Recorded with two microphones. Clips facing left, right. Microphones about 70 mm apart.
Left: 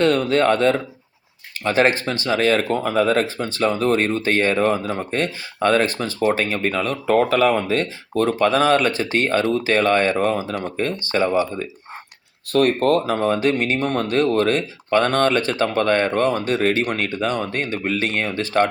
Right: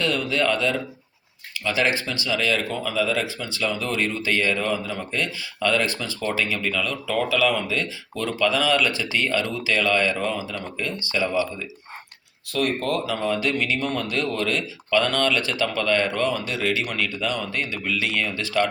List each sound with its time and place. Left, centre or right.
0.0 s speech: left
12.5 s speech: left